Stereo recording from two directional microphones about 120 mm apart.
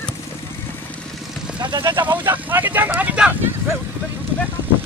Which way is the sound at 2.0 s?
15° right (ahead or behind).